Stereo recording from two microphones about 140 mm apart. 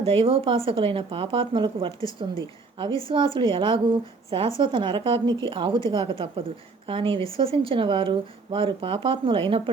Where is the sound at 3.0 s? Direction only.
35° right (ahead or behind).